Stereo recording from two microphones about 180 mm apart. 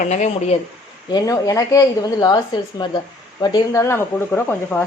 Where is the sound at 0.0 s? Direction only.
40° left (ahead or behind).